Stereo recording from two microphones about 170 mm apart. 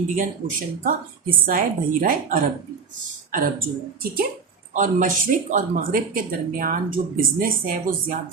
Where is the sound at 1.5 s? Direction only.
50° right (ahead or behind).